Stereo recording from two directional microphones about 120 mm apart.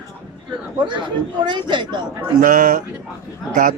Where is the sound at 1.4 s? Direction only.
40° right (ahead or behind).